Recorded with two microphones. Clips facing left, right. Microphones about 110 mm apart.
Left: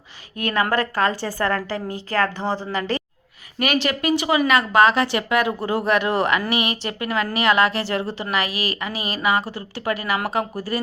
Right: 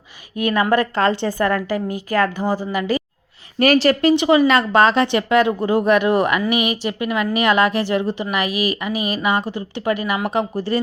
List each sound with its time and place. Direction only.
0.3 s a woman's voice: 15° right (ahead or behind)
3.6 s speech: 35° right (ahead or behind)
4.1 s a woman's voice: 25° right (ahead or behind)